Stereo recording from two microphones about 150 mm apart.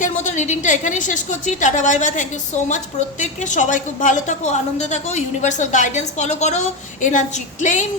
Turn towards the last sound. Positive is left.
turn(degrees=55)  # may be behind; listen again after turning